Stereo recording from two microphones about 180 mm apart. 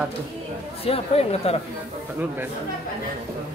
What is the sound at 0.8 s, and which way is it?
Speech, 35° left (ahead or behind).